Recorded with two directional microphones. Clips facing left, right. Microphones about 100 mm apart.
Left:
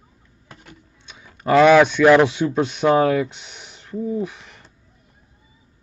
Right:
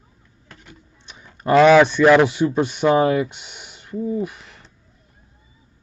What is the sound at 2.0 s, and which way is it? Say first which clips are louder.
Speech: even; 10° left (ahead or behind).